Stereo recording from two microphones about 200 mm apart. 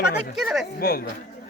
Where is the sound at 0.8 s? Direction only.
50° left (ahead or behind).